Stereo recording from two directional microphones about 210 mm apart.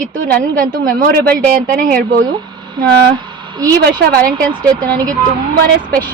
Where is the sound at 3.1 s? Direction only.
20° right (ahead or behind).